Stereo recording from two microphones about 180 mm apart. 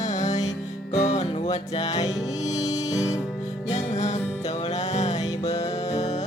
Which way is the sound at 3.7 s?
40° left (ahead or behind).